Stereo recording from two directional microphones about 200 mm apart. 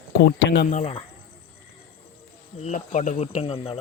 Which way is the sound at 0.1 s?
60° left (ahead or behind).